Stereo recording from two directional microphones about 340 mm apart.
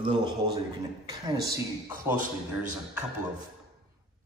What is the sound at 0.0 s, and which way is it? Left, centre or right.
A man's voice, centre.